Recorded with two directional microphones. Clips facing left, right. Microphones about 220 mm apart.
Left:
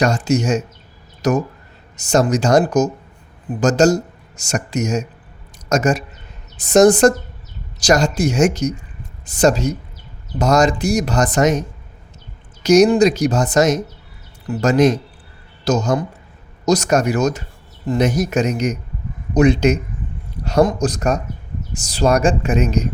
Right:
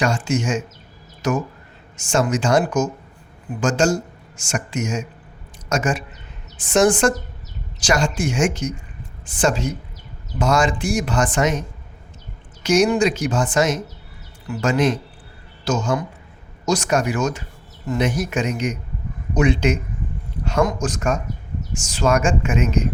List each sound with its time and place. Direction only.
0.0 s speech: 40° left (ahead or behind)
12.6 s speech: 40° left (ahead or behind)